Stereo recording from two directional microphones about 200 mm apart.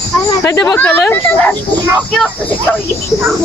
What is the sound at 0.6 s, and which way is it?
Speech, 10° left (ahead or behind).